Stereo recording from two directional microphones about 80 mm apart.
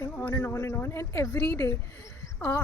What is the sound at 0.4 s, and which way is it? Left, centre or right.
Speech, left.